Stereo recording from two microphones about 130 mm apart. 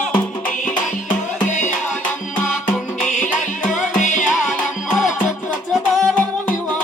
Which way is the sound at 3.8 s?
75° left (ahead or behind).